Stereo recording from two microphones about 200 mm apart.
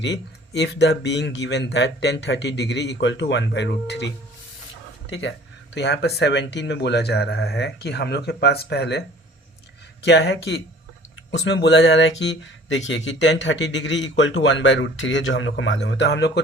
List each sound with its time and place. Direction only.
0.0 s speech: 60° left (ahead or behind)
5.7 s speech: 55° left (ahead or behind)